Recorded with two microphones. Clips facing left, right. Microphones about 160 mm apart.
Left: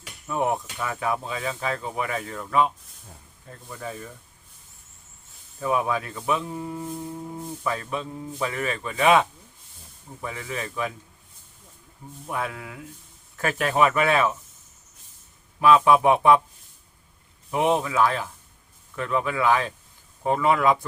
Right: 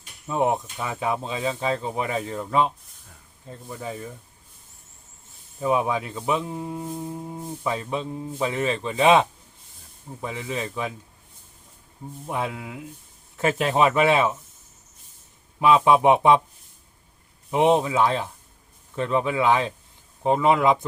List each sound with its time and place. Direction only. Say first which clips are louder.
0.3 s speech: right 2 dB; 20° right (ahead or behind)
5.5 s speech: right 2 dB; 20° right (ahead or behind)
12.3 s speech: right 2 dB; 20° right (ahead or behind)
15.6 s speech: even; 20° right (ahead or behind)
17.5 s speech: right 3 dB; 25° right (ahead or behind)